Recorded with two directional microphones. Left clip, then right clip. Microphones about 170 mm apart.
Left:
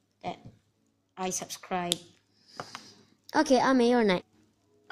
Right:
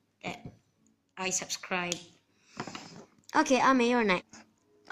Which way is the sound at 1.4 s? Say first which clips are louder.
Even; 45° left (ahead or behind).